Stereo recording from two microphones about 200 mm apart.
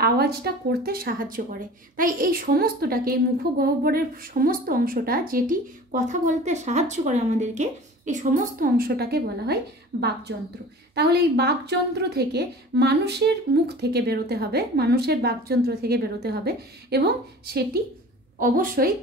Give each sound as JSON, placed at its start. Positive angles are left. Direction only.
{"t": 0.0, "sound": "a woman's voice", "side_deg": -50}
{"t": 18.4, "sound": "a woman's voice", "side_deg": -45}